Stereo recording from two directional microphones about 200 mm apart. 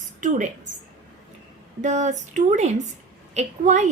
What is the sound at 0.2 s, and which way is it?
Speech, 40° right (ahead or behind).